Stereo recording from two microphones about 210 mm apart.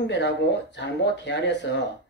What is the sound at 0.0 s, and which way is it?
Speech, 55° left (ahead or behind).